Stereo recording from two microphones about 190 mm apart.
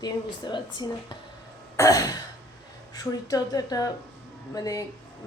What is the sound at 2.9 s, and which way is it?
A woman's voice, 20° left (ahead or behind).